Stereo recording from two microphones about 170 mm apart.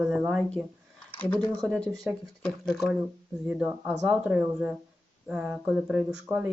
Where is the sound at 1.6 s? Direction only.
15° right (ahead or behind).